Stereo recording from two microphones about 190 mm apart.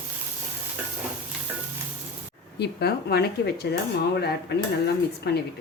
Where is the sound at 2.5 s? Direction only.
60° left (ahead or behind).